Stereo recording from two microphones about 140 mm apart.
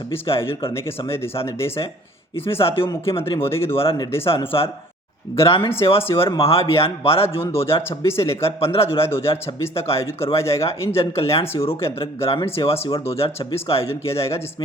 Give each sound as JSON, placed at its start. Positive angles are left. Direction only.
{"t": 0.3, "sound": "speech", "side_deg": 40}
{"t": 2.5, "sound": "speech", "side_deg": 40}
{"t": 7.8, "sound": "a man's voice", "side_deg": 20}
{"t": 8.6, "sound": "speech", "side_deg": 45}